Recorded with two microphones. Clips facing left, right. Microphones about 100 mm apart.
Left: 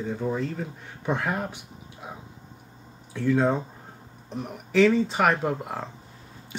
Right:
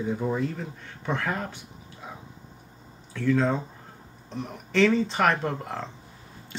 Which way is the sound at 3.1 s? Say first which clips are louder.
Left 1 dB; 15° left (ahead or behind).